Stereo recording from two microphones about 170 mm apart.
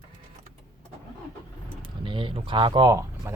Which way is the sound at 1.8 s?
30° right (ahead or behind).